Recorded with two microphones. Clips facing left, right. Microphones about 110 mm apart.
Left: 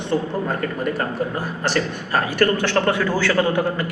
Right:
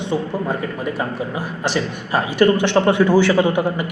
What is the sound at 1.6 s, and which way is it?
A man's voice, 15° right (ahead or behind).